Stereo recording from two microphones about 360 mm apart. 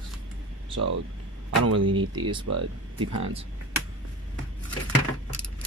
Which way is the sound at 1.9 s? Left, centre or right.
Centre.